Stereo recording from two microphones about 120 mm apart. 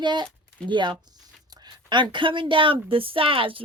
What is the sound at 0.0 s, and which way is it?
Speech, 40° right (ahead or behind).